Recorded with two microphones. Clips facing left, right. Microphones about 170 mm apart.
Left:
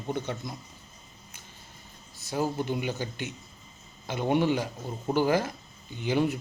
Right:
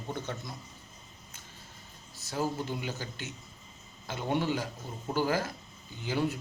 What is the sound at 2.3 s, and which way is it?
A man's voice, 15° left (ahead or behind).